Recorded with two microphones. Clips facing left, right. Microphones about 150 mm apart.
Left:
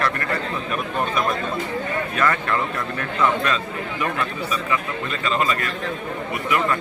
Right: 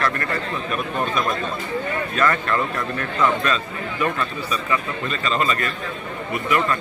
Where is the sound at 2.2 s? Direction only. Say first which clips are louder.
Right 1 dB; 15° left (ahead or behind).